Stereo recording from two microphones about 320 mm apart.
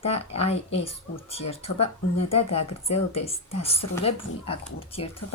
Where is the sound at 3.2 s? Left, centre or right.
Centre.